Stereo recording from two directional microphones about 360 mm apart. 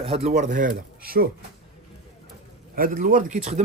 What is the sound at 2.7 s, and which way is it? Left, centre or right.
Speech, right.